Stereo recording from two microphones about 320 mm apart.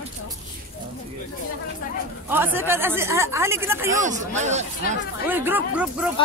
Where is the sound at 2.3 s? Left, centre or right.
Centre.